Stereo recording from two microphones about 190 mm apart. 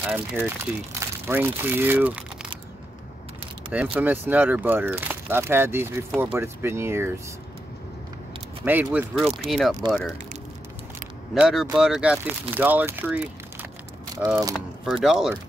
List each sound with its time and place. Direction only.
0.0 s speech: 10° right (ahead or behind)
3.7 s speech: 10° right (ahead or behind)
8.6 s speech: 10° right (ahead or behind)
11.3 s speech: 5° right (ahead or behind); by 14.5 s 20° right (ahead or behind)
14.5 s speech: centre (ahead or behind)